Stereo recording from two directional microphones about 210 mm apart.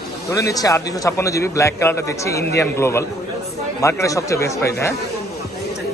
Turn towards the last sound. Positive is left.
turn(degrees=15)  # may be behind; listen again after turning